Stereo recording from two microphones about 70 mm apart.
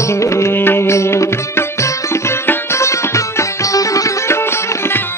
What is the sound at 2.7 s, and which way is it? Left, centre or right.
Music, left.